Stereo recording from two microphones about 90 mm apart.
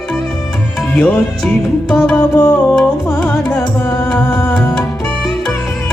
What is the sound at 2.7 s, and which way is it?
Music, 10° left (ahead or behind).